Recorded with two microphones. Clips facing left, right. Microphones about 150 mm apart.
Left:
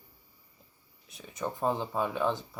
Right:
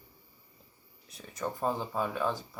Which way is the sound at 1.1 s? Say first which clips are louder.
Left 1 dB; centre (ahead or behind).